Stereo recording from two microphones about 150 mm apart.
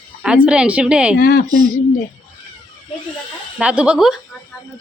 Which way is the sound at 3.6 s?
10° right (ahead or behind).